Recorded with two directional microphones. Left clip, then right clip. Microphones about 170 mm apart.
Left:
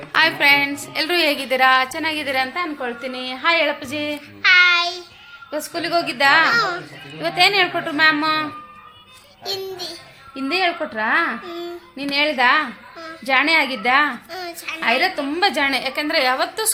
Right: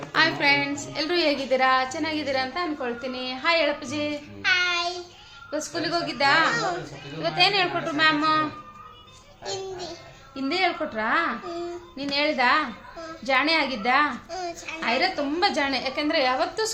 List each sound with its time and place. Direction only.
0.0 s a woman's voice: centre (ahead or behind)
2.2 s a woman's voice: 20° left (ahead or behind)
4.4 s a sound: centre (ahead or behind)
5.5 s a woman's voice: 25° left (ahead or behind)
6.5 s a woman's voice: centre (ahead or behind)
7.2 s a woman's voice: 35° left (ahead or behind)
9.7 s a child's voice: 20° right (ahead or behind)
10.9 s speech: 40° left (ahead or behind)
11.4 s a woman's voice: centre (ahead or behind)
11.9 s a woman's voice: 40° left (ahead or behind)
14.3 s a woman's voice: centre (ahead or behind)
15.3 s a woman's voice: 25° left (ahead or behind)